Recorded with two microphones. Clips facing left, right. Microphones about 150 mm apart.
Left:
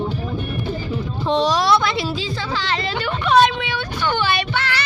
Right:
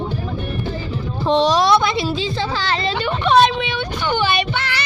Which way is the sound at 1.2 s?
25° right (ahead or behind).